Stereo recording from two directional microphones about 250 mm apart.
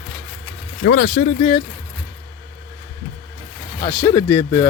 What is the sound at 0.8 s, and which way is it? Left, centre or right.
Speech, left.